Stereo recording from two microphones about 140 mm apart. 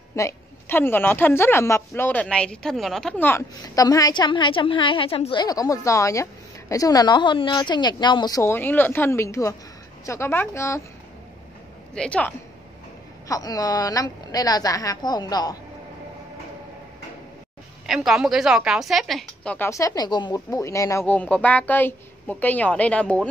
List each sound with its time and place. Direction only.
0.1 s speech: 20° left (ahead or behind)
3.6 s a woman's voice: 25° left (ahead or behind)
11.9 s speech: 5° left (ahead or behind)
13.3 s speech: 25° left (ahead or behind)
17.8 s a woman's voice: centre (ahead or behind)
19.7 s speech: 25° left (ahead or behind); by 23.2 s 10° left (ahead or behind)